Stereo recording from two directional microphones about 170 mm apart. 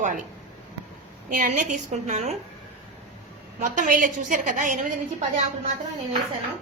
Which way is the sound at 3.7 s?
50° right (ahead or behind).